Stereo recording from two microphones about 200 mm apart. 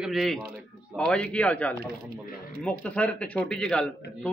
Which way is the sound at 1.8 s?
45° right (ahead or behind).